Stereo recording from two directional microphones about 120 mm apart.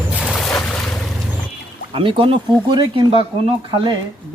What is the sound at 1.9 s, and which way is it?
Speech, 50° right (ahead or behind).